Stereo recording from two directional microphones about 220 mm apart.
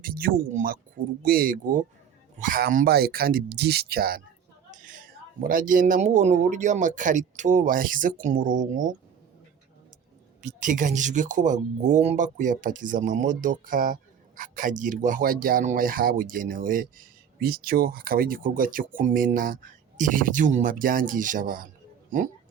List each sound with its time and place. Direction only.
0.0 s speech: 40° right (ahead or behind)
10.4 s speech: 35° right (ahead or behind)